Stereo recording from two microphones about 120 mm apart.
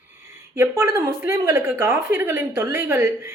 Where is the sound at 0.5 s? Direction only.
20° right (ahead or behind).